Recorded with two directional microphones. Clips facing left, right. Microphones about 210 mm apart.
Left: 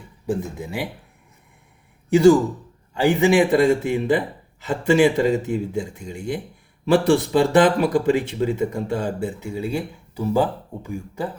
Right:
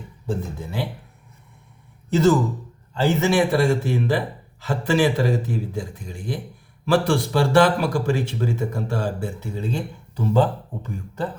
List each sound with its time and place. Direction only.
0.3 s speech: 15° left (ahead or behind)
2.0 s speech: 10° left (ahead or behind)